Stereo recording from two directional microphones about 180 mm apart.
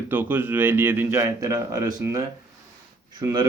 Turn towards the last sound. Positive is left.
turn(degrees=-20)  # may be behind; listen again after turning